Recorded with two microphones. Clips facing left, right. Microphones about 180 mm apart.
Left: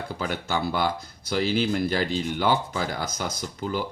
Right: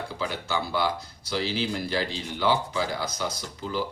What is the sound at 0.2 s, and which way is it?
Speech, 45° left (ahead or behind).